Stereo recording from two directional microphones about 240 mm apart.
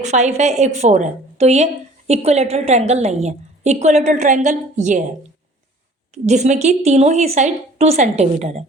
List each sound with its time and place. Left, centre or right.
0.0 s a woman's voice: right
6.2 s a woman's voice: right